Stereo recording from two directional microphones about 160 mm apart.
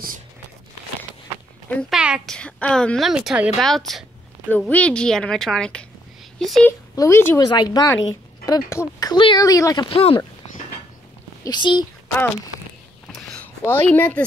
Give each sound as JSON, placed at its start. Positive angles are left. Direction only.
{"t": 1.7, "sound": "a woman's voice", "side_deg": 5}
{"t": 2.0, "sound": "a woman's voice", "side_deg": -5}
{"t": 2.3, "sound": "a woman's voice", "side_deg": 5}
{"t": 7.0, "sound": "speech", "side_deg": 15}
{"t": 11.4, "sound": "speech", "side_deg": 30}
{"t": 13.1, "sound": "a sound", "side_deg": 5}